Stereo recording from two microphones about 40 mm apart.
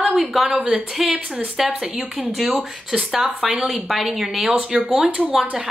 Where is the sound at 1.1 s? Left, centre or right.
Centre.